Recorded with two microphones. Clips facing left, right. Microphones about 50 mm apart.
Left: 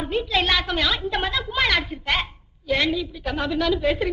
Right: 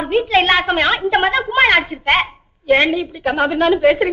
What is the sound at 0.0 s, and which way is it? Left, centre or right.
A woman's voice, right.